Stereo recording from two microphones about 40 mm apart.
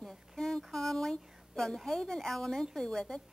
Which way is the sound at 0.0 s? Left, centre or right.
Centre.